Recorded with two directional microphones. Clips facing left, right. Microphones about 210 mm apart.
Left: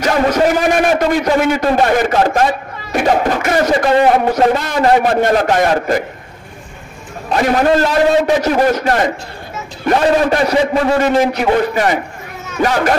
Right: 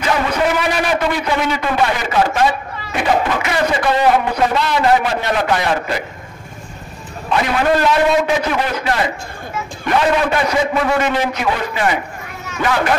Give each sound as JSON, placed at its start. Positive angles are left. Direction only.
{"t": 0.0, "sound": "a man's voice", "side_deg": 40}
{"t": 7.2, "sound": "a man's voice", "side_deg": 45}